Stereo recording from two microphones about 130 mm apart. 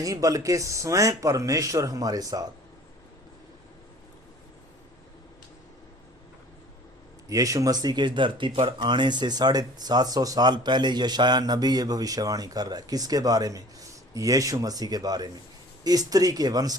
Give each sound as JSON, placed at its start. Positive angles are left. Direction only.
{"t": 0.0, "sound": "speech", "side_deg": -25}
{"t": 7.3, "sound": "speech", "side_deg": -25}